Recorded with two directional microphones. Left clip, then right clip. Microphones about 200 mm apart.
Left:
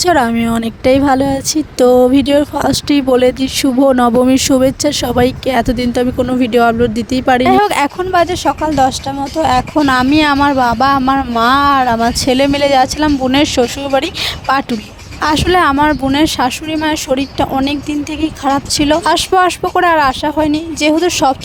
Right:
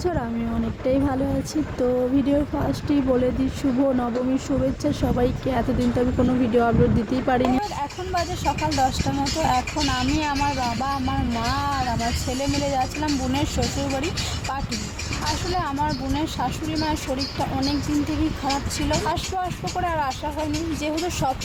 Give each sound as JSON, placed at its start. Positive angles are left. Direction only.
{"t": 0.0, "sound": "speech", "side_deg": 60}
{"t": 15.5, "sound": "speech", "side_deg": 55}
{"t": 18.4, "sound": "speech", "side_deg": 45}